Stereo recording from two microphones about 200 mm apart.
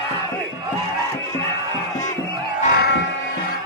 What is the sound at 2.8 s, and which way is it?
Music, 55° left (ahead or behind).